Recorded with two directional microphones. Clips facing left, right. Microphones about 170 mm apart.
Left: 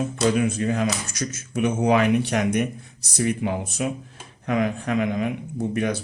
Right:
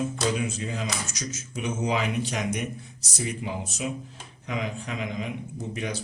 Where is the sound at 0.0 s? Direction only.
55° left (ahead or behind).